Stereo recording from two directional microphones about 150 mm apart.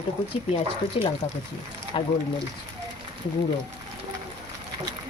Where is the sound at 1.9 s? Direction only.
35° left (ahead or behind).